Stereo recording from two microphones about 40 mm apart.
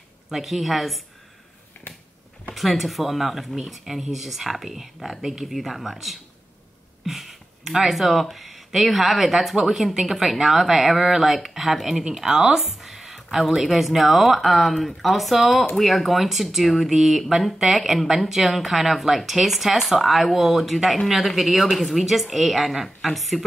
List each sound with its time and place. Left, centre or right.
0.3 s speech: centre
2.5 s speech: centre
7.1 s speech: centre
12.0 s speech: centre
12.5 s speech: centre